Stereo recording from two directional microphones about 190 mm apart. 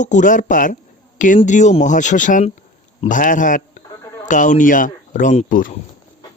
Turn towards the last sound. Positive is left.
turn(degrees=45)  # may be behind; listen again after turning